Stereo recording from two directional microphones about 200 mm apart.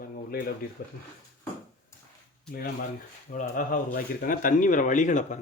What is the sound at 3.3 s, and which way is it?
Speech, 40° left (ahead or behind).